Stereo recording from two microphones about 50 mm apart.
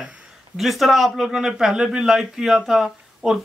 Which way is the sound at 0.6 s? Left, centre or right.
Centre.